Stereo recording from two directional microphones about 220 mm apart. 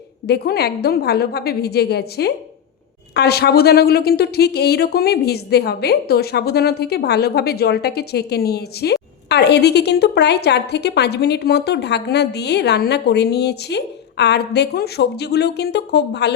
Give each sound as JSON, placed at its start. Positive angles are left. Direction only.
{"t": 0.3, "sound": "speech", "side_deg": 45}